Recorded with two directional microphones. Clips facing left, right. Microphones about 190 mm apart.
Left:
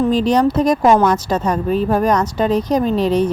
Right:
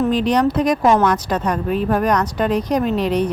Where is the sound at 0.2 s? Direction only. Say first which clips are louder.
Left 2 dB; 25° left (ahead or behind).